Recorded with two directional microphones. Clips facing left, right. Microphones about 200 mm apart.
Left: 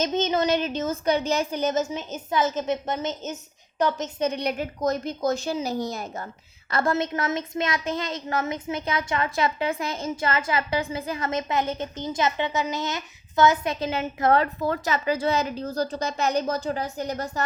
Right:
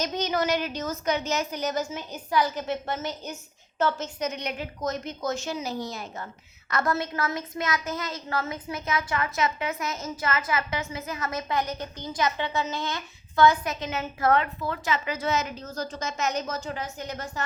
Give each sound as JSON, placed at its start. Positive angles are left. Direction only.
{"t": 0.0, "sound": "a woman's voice", "side_deg": 25}
{"t": 4.3, "sound": "a woman's voice", "side_deg": 35}
{"t": 6.7, "sound": "a woman's voice", "side_deg": 30}
{"t": 13.7, "sound": "a woman's voice", "side_deg": 35}
{"t": 14.0, "sound": "a woman's voice", "side_deg": 25}
{"t": 14.3, "sound": "a woman's voice", "side_deg": 40}